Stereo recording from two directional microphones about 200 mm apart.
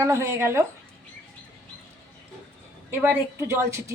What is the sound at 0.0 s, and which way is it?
Speech, 15° right (ahead or behind).